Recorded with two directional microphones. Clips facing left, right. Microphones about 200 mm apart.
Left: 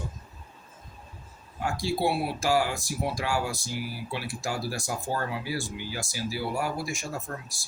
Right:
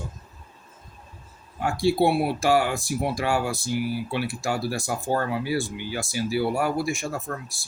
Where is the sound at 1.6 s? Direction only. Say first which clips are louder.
Right 6 dB; 60° right (ahead or behind).